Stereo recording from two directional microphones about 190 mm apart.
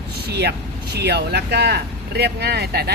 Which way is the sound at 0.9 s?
60° right (ahead or behind).